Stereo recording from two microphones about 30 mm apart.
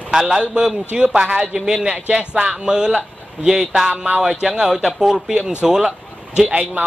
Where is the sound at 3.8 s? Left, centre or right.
Right.